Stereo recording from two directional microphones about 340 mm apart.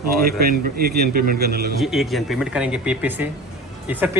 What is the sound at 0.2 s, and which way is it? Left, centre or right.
A man's voice, right.